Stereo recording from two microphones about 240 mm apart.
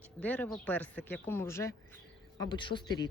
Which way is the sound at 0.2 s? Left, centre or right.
Centre.